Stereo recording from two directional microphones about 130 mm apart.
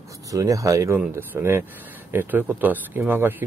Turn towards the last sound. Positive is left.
turn(degrees=-15)  # may be behind; listen again after turning